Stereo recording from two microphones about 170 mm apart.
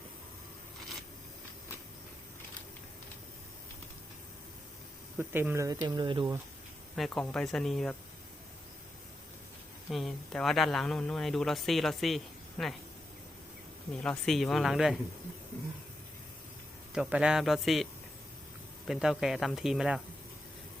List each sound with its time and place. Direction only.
5.1 s speech: 10° right (ahead or behind)
6.9 s speech: centre (ahead or behind)
9.9 s speech: centre (ahead or behind)
13.9 s speech: 5° left (ahead or behind)
16.9 s speech: 5° right (ahead or behind)
18.9 s speech: 5° right (ahead or behind)